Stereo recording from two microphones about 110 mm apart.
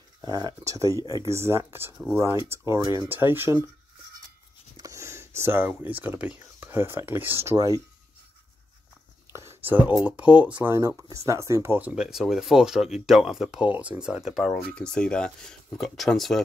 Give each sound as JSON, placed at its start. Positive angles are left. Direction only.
{"t": 0.2, "sound": "speech", "side_deg": -35}
{"t": 4.7, "sound": "speech", "side_deg": -30}
{"t": 9.3, "sound": "whispering", "side_deg": -25}
{"t": 9.9, "sound": "speech", "side_deg": -10}
{"t": 10.8, "sound": "speech", "side_deg": -30}
{"t": 11.9, "sound": "speech", "side_deg": -5}